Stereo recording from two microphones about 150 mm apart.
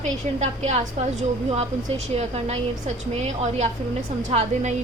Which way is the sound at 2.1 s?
45° right (ahead or behind).